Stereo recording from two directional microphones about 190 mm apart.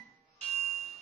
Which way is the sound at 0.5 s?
Centre (ahead or behind).